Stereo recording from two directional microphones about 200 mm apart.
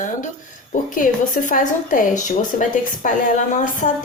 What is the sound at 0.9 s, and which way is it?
A woman's voice, 40° left (ahead or behind).